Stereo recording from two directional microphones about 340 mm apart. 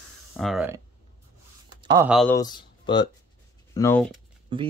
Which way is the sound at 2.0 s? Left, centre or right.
Centre.